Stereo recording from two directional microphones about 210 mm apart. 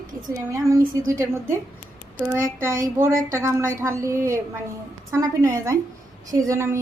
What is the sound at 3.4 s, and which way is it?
A woman's voice, 15° right (ahead or behind).